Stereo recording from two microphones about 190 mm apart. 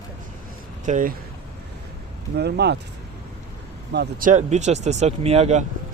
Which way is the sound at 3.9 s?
60° right (ahead or behind).